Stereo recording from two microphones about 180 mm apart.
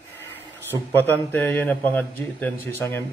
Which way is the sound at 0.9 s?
10° left (ahead or behind).